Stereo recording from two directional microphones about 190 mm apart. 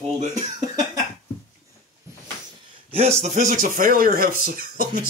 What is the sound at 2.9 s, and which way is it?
Speech, 35° right (ahead or behind).